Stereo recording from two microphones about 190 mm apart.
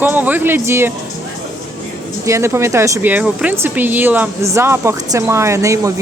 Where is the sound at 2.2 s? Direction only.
15° right (ahead or behind).